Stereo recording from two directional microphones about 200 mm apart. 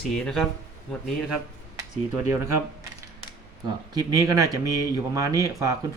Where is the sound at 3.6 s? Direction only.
20° right (ahead or behind).